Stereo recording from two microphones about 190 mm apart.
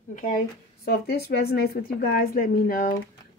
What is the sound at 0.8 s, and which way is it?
A woman's voice, 55° left (ahead or behind).